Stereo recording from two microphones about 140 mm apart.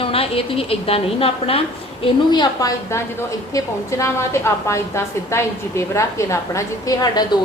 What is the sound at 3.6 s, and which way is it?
A woman's voice, 20° left (ahead or behind).